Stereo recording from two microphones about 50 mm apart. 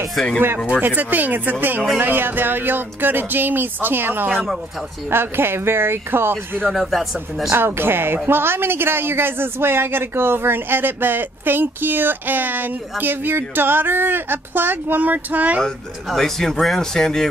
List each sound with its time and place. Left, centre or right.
0.1 s speech: centre
0.7 s speech: right
6.7 s speech: centre
7.5 s speech: right
16.1 s speech: centre